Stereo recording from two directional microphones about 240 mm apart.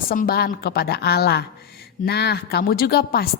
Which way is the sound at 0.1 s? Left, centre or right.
Left.